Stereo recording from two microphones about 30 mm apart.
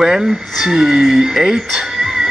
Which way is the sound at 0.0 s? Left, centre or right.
Centre.